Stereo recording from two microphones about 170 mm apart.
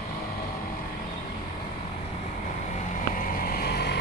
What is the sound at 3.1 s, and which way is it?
Boat, 55° left (ahead or behind).